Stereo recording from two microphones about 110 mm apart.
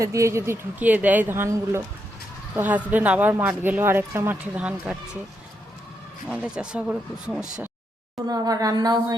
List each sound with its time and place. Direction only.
0.0 s a woman's voice: 25° right (ahead or behind); by 4.9 s 10° right (ahead or behind)
6.3 s speech: 10° right (ahead or behind)
8.3 s speech: 35° right (ahead or behind)